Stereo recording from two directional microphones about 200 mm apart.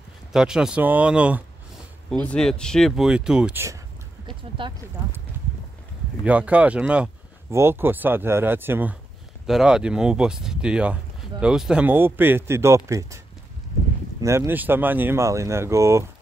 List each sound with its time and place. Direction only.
0.3 s speech: 5° right (ahead or behind)
2.0 s speech: 5° left (ahead or behind)
4.3 s speech: 25° right (ahead or behind)
6.2 s speech: 5° right (ahead or behind)
14.2 s speech: 15° right (ahead or behind)